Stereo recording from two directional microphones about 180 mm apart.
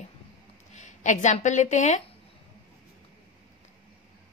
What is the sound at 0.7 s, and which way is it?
Speech, 40° left (ahead or behind).